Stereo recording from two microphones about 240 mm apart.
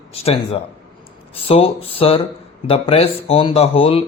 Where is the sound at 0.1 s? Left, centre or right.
Left.